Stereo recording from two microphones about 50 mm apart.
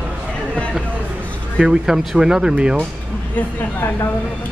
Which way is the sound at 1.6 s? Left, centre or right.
Centre.